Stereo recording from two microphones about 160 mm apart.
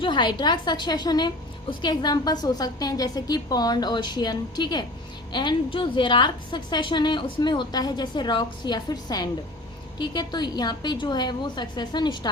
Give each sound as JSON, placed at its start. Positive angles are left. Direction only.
{"t": 0.0, "sound": "a woman's voice", "side_deg": 30}